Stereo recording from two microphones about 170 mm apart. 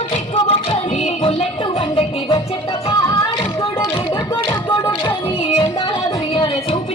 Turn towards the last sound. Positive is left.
turn(degrees=30)  # may be behind; listen again after turning